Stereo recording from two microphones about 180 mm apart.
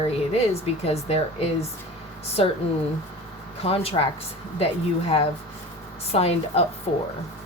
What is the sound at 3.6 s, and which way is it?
Speech, 35° left (ahead or behind).